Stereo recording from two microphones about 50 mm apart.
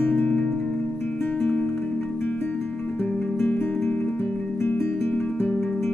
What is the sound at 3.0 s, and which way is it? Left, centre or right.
Music, left.